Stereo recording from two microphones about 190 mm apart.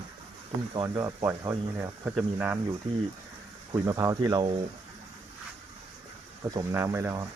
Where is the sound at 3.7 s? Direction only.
20° right (ahead or behind).